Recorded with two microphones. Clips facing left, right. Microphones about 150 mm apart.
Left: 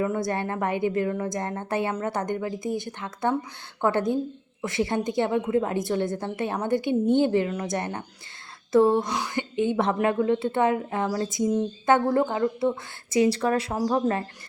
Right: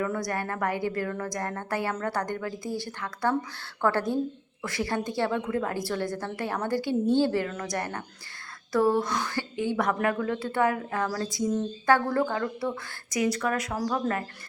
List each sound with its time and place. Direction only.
0.0 s a woman's voice: 25° left (ahead or behind)